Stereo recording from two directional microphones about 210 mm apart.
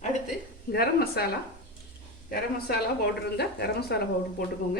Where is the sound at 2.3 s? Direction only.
50° left (ahead or behind).